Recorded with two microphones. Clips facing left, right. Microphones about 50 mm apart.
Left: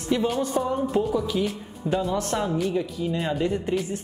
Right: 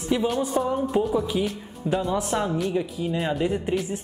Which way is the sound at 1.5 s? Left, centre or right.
Centre.